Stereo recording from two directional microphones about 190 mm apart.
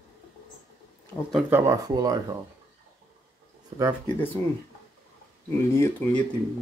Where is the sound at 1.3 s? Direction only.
5° right (ahead or behind).